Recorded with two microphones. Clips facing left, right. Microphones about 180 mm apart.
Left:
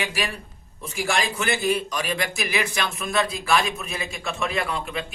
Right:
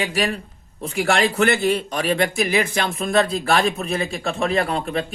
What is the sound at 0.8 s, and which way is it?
A man's voice, 60° right (ahead or behind).